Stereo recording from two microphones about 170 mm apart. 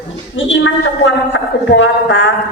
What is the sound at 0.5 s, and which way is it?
A man's voice, 90° left.